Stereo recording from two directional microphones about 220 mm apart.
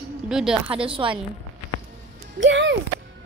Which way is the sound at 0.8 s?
25° right (ahead or behind).